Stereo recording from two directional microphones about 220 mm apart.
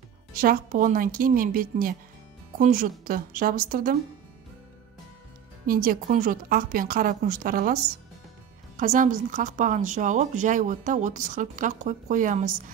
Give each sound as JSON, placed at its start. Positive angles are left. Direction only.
{"t": 0.3, "sound": "a woman's voice", "side_deg": -40}
{"t": 5.7, "sound": "a woman's voice", "side_deg": -40}